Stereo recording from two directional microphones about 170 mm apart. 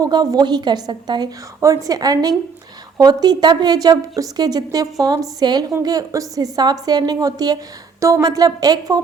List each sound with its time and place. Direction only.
0.0 s a woman's voice: 25° right (ahead or behind)